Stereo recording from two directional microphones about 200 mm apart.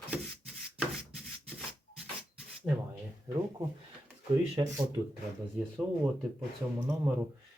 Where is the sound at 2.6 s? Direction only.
10° right (ahead or behind).